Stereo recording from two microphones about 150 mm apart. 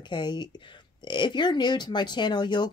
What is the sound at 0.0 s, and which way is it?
Speech, 30° left (ahead or behind).